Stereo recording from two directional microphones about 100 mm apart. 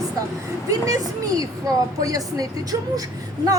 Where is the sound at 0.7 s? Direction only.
35° right (ahead or behind).